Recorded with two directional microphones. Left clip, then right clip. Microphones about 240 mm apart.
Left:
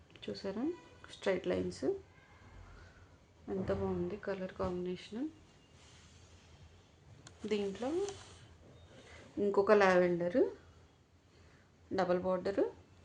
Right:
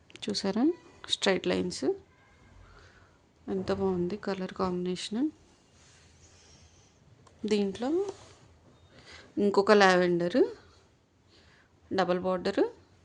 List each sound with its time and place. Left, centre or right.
0.1 s speech: right
3.4 s speech: right
7.4 s speech: right
9.4 s speech: right
11.9 s speech: right